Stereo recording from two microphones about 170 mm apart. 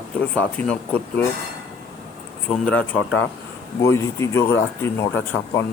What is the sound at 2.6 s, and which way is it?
Speech, 10° left (ahead or behind).